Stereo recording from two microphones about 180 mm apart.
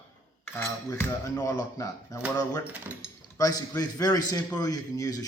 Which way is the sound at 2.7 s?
10° right (ahead or behind).